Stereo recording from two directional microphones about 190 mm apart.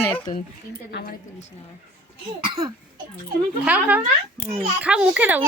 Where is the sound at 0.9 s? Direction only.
60° left (ahead or behind).